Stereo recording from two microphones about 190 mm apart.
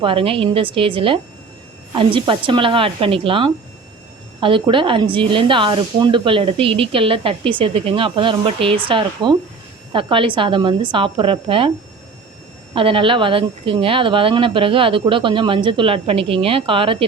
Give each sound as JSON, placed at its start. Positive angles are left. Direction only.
{"t": 0.0, "sound": "speech", "side_deg": -30}
{"t": 12.7, "sound": "speech", "side_deg": -30}